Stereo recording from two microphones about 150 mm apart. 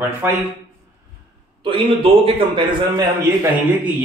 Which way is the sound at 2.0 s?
35° right (ahead or behind).